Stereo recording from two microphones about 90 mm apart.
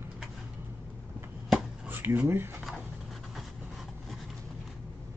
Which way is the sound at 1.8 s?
20° right (ahead or behind).